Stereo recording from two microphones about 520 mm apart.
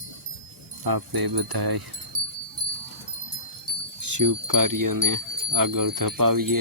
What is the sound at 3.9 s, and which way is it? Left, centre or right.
Speech, right.